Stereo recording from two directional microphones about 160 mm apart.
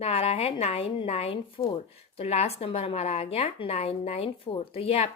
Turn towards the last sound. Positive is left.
turn(degrees=40)  # may be behind; listen again after turning